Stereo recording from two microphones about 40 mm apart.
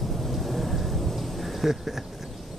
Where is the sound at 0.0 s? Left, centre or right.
Centre.